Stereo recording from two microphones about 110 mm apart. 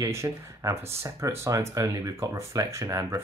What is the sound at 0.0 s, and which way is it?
Speech, 25° right (ahead or behind).